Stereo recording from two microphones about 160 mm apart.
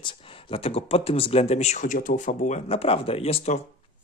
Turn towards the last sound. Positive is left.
turn(degrees=40)  # may be behind; listen again after turning